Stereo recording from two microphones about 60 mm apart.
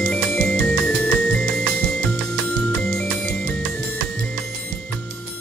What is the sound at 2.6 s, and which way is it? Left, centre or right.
Music, centre.